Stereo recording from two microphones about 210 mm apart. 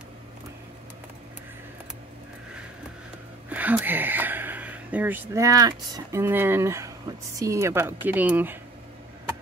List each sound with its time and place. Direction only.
3.4 s speech: 5° right (ahead or behind)